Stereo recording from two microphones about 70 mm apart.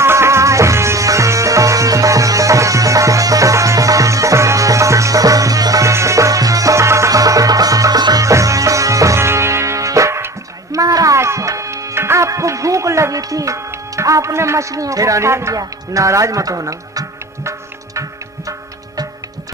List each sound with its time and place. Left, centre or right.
0.0 s music: right
8.3 s music: right
10.8 s music: right
15.5 s speech: right